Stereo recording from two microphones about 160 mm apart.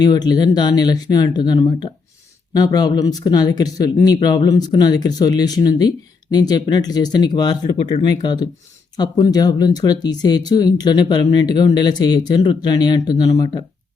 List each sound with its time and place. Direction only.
0.0 s speech: 25° left (ahead or behind)